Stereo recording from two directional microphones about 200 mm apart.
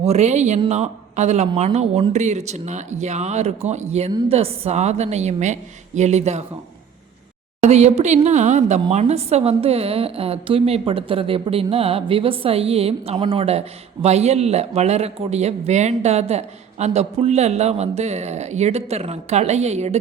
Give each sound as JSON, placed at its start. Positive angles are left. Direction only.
{"t": 0.0, "sound": "a man's voice", "side_deg": -35}
{"t": 7.6, "sound": "a woman's voice", "side_deg": -35}